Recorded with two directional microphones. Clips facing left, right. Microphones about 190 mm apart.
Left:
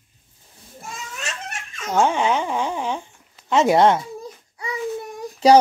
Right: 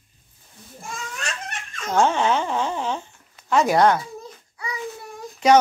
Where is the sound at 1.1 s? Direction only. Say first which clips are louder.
Even; 5° left (ahead or behind); by 4.0 s 25° left (ahead or behind).